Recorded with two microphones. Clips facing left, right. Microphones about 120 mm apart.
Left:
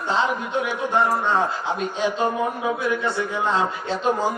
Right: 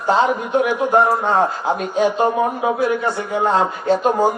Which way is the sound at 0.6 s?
55° right (ahead or behind).